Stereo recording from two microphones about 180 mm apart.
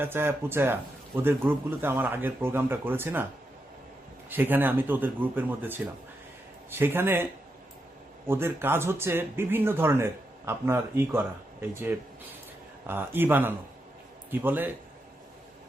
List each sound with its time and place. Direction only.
0.0 s speech: 10° right (ahead or behind)
4.3 s speech: 10° right (ahead or behind)
8.3 s speech: 10° right (ahead or behind)